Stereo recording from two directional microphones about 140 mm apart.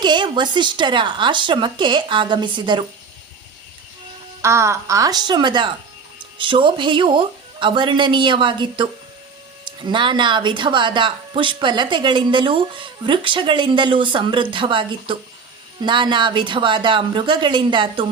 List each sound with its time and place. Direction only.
0.0 s speech: 35° right (ahead or behind)
4.4 s a woman's voice: 20° right (ahead or behind)